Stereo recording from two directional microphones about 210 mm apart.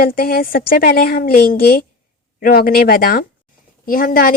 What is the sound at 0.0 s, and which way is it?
A woman's voice, 45° left (ahead or behind).